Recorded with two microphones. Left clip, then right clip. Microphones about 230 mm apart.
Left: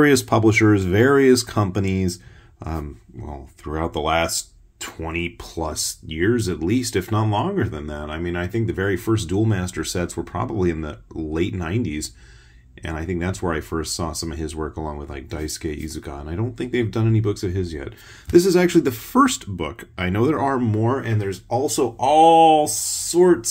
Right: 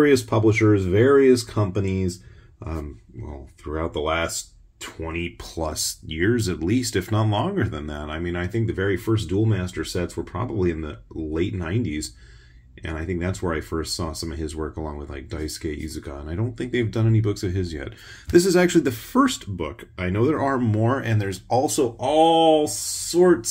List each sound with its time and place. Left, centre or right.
0.0 s speech: left; by 21.7 s centre
21.7 s speech: centre